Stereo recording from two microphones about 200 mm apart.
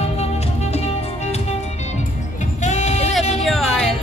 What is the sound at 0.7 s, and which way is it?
Music, 30° left (ahead or behind).